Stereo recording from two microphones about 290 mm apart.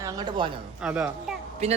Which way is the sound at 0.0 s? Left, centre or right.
Centre.